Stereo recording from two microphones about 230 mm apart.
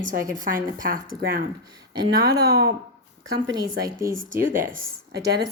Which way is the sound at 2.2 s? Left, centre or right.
Right.